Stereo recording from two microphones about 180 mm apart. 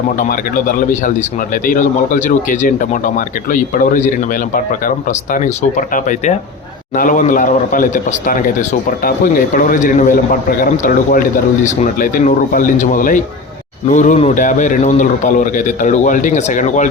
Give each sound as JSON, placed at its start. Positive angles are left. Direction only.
{"t": 0.2, "sound": "speech", "side_deg": 50}
{"t": 9.0, "sound": "speech", "side_deg": 50}